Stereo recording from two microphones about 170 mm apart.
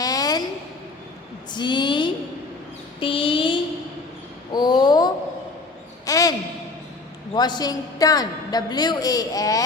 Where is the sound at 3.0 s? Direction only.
30° left (ahead or behind).